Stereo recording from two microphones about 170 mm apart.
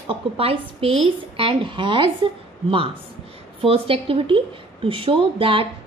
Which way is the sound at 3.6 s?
35° right (ahead or behind).